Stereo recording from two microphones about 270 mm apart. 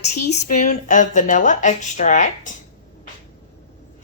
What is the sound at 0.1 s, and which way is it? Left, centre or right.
Speech, left.